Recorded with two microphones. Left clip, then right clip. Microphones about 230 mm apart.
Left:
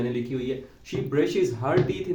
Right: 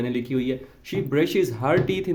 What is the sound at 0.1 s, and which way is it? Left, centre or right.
Speech, right.